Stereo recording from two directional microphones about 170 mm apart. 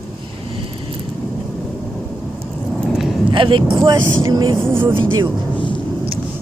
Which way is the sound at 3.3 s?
30° right (ahead or behind).